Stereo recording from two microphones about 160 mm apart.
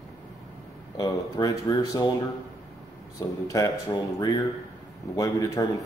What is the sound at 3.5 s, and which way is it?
Speech, 20° left (ahead or behind).